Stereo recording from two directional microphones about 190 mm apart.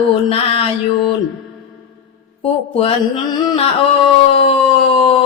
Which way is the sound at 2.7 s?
30° left (ahead or behind).